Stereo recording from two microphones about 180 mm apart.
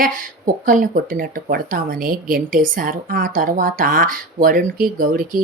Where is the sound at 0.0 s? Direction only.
50° right (ahead or behind).